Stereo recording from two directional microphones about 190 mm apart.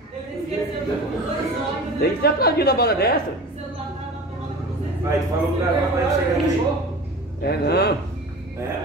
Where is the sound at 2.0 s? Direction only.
55° left (ahead or behind).